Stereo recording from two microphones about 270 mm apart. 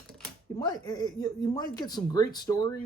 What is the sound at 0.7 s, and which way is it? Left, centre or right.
Speech, centre.